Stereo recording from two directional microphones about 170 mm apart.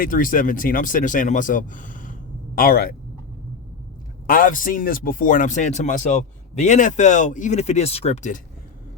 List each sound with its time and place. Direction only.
0.0 s a man's voice: 55° left (ahead or behind)
2.6 s speech: 60° left (ahead or behind)
4.3 s a man's voice: 55° left (ahead or behind)